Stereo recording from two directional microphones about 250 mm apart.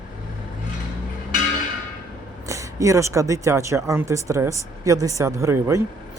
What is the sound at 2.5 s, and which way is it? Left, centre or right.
Speech, centre.